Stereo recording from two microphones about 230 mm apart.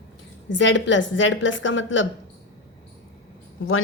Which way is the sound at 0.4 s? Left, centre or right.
Left.